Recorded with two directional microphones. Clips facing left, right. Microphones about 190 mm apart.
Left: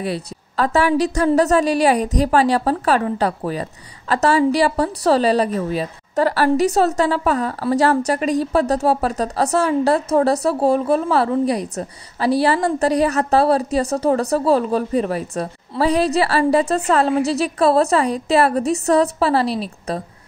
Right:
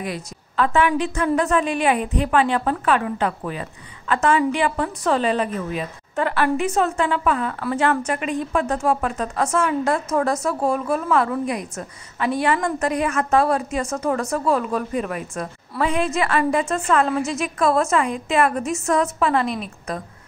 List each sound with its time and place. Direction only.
0.0 s a woman's voice: 35° left (ahead or behind)